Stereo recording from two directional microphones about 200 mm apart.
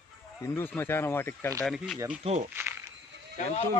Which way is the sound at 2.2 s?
35° right (ahead or behind).